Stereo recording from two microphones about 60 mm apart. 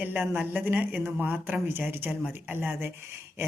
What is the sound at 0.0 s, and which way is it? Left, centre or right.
A woman's voice, right.